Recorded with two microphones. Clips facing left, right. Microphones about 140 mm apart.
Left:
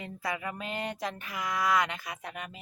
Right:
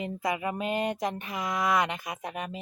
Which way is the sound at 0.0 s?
20° right (ahead or behind).